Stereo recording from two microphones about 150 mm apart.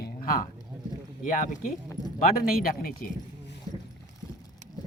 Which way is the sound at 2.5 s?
75° left (ahead or behind).